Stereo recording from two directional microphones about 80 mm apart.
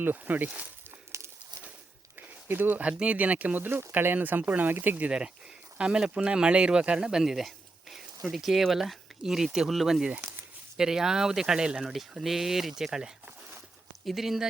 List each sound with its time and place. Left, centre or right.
0.0 s speech: right
0.9 s a sound: right
2.1 s speech: right; by 14.4 s centre